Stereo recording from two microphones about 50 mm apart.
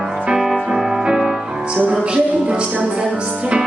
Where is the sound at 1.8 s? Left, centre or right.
Right.